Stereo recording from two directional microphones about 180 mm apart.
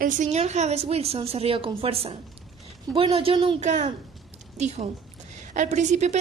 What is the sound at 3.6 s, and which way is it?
A woman's voice, 40° right (ahead or behind).